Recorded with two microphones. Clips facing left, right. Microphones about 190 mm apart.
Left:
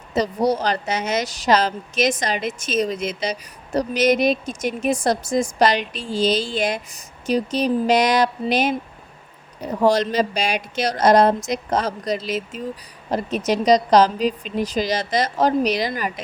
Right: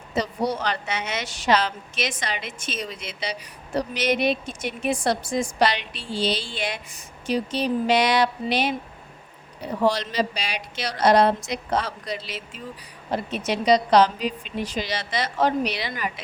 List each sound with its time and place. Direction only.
0.1 s speech: 40° left (ahead or behind)